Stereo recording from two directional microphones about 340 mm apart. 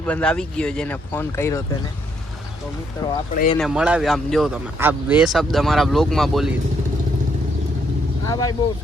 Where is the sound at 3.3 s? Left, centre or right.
Left.